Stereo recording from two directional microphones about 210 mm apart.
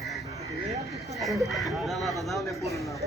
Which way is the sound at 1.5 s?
Centre (ahead or behind).